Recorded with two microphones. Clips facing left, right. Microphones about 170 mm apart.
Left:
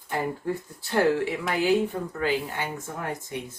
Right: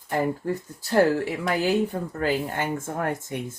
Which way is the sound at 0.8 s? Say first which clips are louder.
Right 3 dB; 40° right (ahead or behind).